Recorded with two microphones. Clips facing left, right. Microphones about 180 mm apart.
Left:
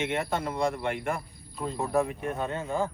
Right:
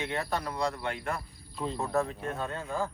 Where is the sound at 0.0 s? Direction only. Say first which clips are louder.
Left 3 dB; 20° left (ahead or behind).